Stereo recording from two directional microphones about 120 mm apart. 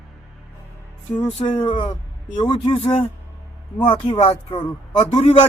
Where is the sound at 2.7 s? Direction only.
50° left (ahead or behind).